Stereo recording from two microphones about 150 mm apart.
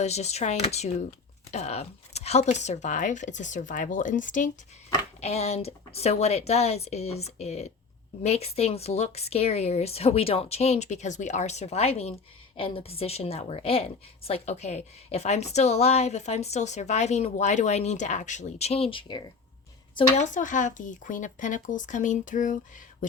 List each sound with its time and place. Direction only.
0.0 s a woman's voice: 45° left (ahead or behind)
5.2 s a woman's voice: 45° left (ahead or behind)
20.1 s speech: 55° left (ahead or behind)